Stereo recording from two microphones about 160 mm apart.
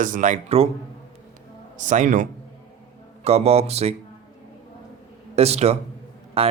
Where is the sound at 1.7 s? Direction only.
50° right (ahead or behind).